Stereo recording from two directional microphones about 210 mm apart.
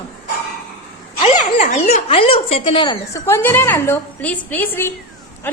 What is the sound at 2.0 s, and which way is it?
A woman's voice, 25° left (ahead or behind).